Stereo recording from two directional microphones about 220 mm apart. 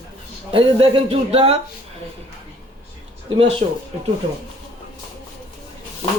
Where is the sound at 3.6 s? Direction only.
30° right (ahead or behind).